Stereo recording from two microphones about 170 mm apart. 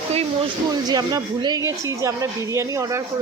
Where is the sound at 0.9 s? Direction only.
25° right (ahead or behind).